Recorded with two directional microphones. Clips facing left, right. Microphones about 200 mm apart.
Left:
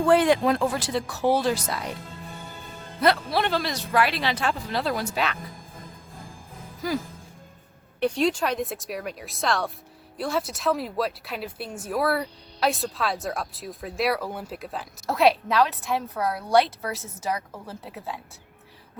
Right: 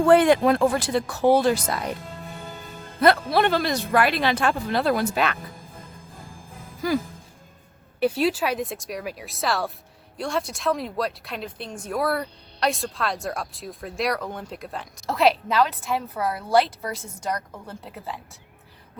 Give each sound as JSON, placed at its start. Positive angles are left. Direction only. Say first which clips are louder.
{"t": 0.1, "sound": "speech", "louder": "right 3 dB", "side_deg": -55}
{"t": 3.0, "sound": "speech", "louder": "right 4 dB", "side_deg": -55}
{"t": 7.9, "sound": "speech", "louder": "right 1 dB", "side_deg": -5}